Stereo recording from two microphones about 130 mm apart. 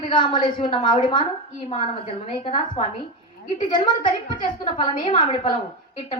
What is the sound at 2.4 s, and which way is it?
A woman's voice, 40° left (ahead or behind).